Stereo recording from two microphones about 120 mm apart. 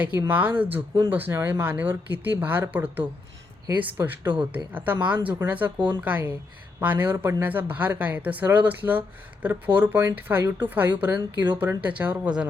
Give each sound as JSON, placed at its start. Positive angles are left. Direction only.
{"t": 0.0, "sound": "speech", "side_deg": -15}